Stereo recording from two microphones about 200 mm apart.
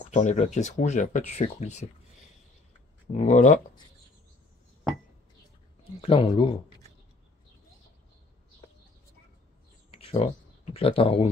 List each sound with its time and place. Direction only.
0.0 s speech: 35° left (ahead or behind)
3.1 s speech: 40° left (ahead or behind)
5.9 s speech: 30° left (ahead or behind)
9.8 s a sound: 30° left (ahead or behind)